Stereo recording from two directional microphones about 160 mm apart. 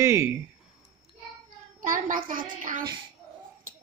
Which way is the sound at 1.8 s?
60° right (ahead or behind).